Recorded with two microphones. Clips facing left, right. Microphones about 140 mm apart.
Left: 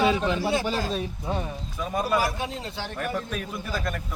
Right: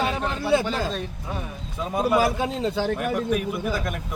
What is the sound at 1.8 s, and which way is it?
A man's voice, 20° right (ahead or behind).